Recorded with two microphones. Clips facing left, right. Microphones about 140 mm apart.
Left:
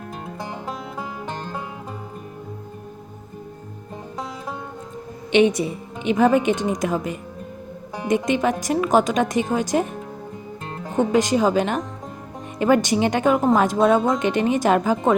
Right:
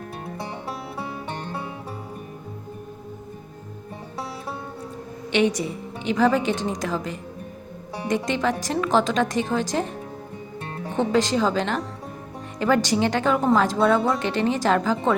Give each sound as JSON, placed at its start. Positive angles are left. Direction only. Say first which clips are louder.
{"t": 5.3, "sound": "a woman's voice", "louder": "left 4 dB", "side_deg": 20}
{"t": 10.9, "sound": "a woman's voice", "louder": "left 3 dB", "side_deg": 15}